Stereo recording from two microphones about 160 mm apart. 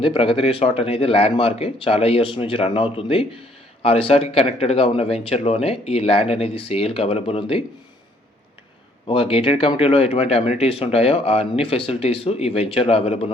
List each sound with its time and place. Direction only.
0.0 s speech: 35° left (ahead or behind)
9.0 s speech: 35° left (ahead or behind)